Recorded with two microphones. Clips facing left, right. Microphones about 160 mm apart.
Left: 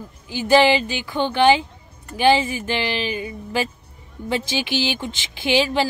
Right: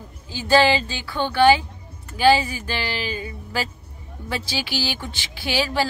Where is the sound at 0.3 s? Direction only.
20° left (ahead or behind).